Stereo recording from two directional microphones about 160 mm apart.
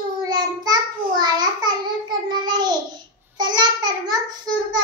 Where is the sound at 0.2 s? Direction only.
25° right (ahead or behind).